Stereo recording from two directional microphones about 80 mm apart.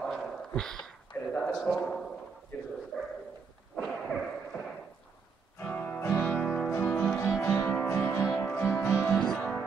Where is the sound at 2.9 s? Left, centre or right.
Centre.